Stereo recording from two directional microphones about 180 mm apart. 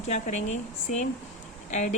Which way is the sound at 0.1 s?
40° left (ahead or behind).